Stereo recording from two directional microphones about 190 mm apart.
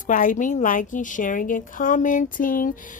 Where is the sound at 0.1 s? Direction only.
45° left (ahead or behind).